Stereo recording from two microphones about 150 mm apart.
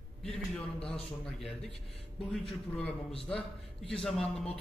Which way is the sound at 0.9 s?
5° left (ahead or behind).